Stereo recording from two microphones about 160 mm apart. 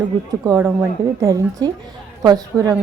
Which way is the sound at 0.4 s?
15° right (ahead or behind).